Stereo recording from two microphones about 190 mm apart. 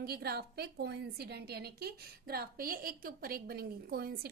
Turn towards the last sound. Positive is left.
turn(degrees=-55)  # may be behind; listen again after turning